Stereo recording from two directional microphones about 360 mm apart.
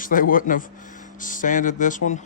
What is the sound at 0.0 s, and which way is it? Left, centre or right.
Speech, left.